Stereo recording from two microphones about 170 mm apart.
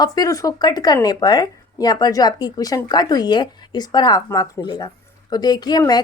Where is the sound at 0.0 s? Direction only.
20° left (ahead or behind).